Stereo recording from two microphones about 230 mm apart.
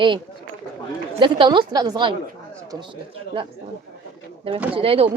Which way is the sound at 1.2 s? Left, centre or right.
Right.